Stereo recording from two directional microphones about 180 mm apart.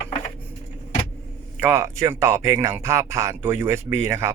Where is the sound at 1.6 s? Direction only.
15° right (ahead or behind).